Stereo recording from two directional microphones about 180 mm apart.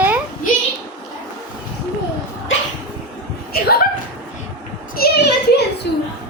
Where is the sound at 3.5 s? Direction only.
55° left (ahead or behind).